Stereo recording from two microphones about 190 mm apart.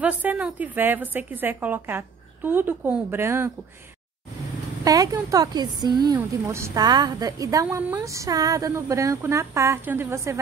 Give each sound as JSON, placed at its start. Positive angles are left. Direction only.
{"t": 0.0, "sound": "a woman's voice", "side_deg": -10}
{"t": 4.8, "sound": "a woman's voice", "side_deg": -20}
{"t": 7.6, "sound": "a woman's voice", "side_deg": -10}